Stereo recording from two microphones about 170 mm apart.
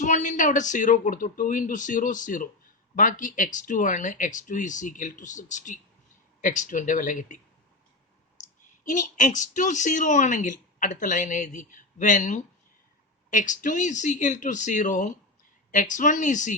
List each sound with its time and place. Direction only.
0.0 s a woman's voice: 45° left (ahead or behind)
8.8 s a woman's voice: 50° left (ahead or behind)